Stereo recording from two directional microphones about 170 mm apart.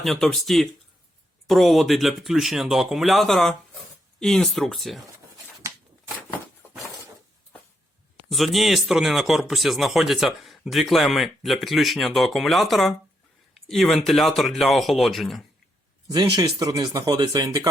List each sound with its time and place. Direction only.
0.0 s speech: centre (ahead or behind)
8.3 s speech: centre (ahead or behind)
16.0 s speech: 20° right (ahead or behind)